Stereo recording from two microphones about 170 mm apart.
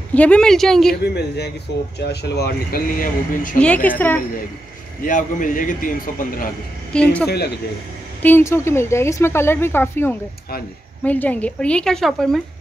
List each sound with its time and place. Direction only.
0.1 s speech: 10° left (ahead or behind)
1.0 s speech: 80° left; by 3.5 s 55° left (ahead or behind)
3.5 s speech: 10° left (ahead or behind)
5.0 s a man's voice: 50° left (ahead or behind)
6.9 s a woman's voice: 5° left (ahead or behind)
7.2 s speech: 70° left (ahead or behind)
8.2 s speech: 10° left (ahead or behind)